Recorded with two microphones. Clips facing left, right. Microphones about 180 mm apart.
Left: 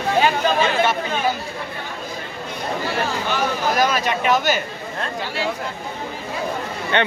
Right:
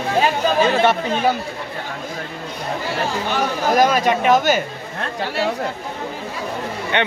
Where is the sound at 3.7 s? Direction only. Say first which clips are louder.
Right 8 dB; 45° right (ahead or behind).